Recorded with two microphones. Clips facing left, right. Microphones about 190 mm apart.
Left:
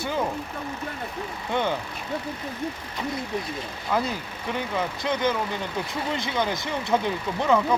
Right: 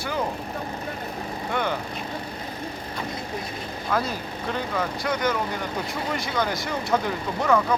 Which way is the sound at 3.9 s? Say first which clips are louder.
Even; 15° left (ahead or behind).